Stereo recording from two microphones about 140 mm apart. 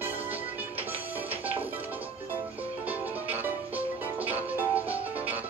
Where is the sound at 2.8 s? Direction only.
10° right (ahead or behind).